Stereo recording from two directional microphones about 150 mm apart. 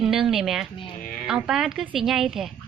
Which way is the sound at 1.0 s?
65° left (ahead or behind).